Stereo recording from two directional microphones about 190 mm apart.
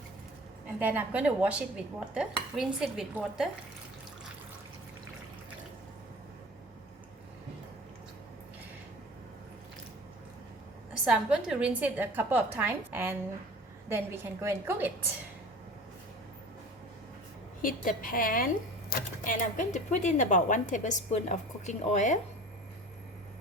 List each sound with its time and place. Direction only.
0.8 s dishes: 10° right (ahead or behind)
11.0 s a woman's voice: 5° right (ahead or behind)
17.6 s a woman's voice: 45° left (ahead or behind)